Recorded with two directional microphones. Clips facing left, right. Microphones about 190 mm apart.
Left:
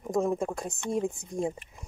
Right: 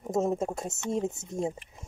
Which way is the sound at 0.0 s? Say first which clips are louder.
Even; 25° right (ahead or behind).